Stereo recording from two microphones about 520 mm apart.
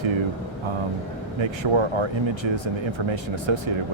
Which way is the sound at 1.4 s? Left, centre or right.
Right.